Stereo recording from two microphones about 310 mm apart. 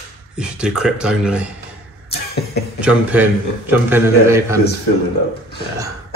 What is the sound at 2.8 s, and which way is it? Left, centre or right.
A man's voice, centre.